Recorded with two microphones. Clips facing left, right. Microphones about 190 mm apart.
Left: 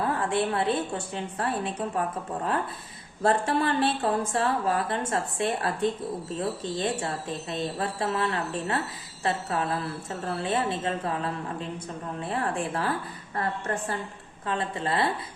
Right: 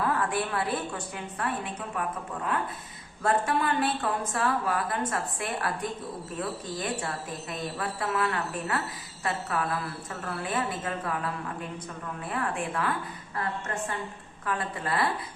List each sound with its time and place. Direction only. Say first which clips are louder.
0.0 s speech: left 2 dB; 25° left (ahead or behind)
14.4 s speech: left 3 dB; 25° left (ahead or behind)